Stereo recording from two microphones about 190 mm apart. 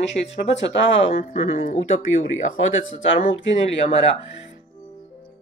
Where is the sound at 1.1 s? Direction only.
35° left (ahead or behind).